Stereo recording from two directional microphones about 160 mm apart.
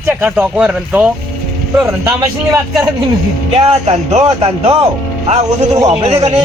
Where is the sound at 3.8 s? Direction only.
45° right (ahead or behind).